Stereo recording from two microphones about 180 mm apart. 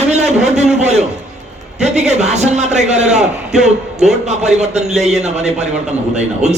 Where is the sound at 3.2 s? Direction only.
5° right (ahead or behind).